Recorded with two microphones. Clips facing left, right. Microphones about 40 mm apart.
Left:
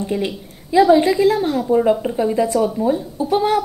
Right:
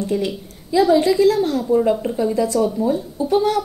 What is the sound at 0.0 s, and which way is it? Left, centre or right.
A woman's voice, left.